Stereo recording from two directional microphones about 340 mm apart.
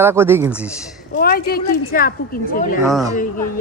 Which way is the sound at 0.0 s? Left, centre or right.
Centre.